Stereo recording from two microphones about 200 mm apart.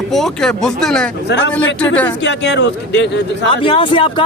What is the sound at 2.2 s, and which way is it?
Speech, 60° left (ahead or behind).